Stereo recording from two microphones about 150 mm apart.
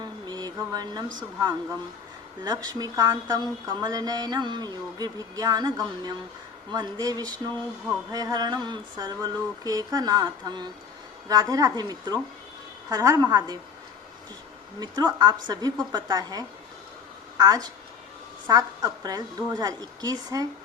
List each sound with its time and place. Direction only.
0.0 s a sound: 25° right (ahead or behind)
2.4 s speech: 25° right (ahead or behind)
14.8 s a woman's voice: 30° right (ahead or behind)